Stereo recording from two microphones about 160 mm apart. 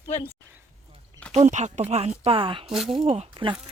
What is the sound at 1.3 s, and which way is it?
A woman's voice, 45° right (ahead or behind).